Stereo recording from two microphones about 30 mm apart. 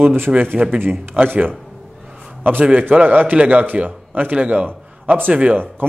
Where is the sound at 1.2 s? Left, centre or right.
Right.